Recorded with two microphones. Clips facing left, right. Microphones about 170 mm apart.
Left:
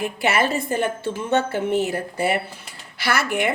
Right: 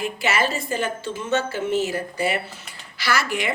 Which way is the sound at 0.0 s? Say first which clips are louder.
Left 2 dB; 55° left (ahead or behind).